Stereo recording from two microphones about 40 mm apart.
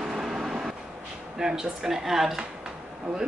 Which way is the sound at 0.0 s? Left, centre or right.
Centre.